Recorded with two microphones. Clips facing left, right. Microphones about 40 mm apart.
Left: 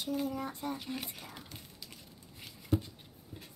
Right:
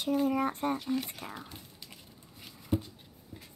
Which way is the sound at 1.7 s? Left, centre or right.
Centre.